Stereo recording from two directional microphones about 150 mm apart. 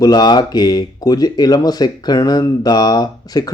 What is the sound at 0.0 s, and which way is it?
Speech, 25° left (ahead or behind).